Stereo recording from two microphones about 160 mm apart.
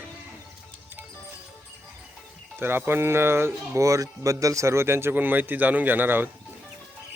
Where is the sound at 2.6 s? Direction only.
15° right (ahead or behind).